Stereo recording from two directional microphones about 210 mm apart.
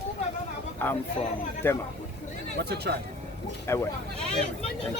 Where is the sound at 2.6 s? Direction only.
50° right (ahead or behind).